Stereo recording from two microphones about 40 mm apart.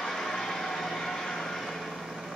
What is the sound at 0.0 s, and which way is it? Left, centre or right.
Vehicle, centre.